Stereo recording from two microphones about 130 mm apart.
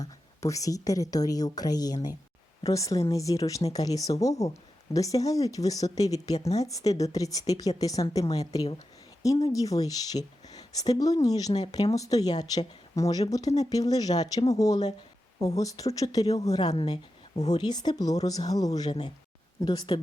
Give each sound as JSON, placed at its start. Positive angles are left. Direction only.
{"t": 0.0, "sound": "a woman's voice", "side_deg": 25}
{"t": 17.3, "sound": "a woman's voice", "side_deg": 60}
{"t": 17.6, "sound": "a woman's voice", "side_deg": 35}